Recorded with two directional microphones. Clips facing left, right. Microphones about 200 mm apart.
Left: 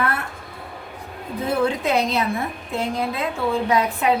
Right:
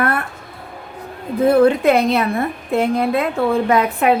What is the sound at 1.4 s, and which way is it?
A woman's voice, 60° right (ahead or behind).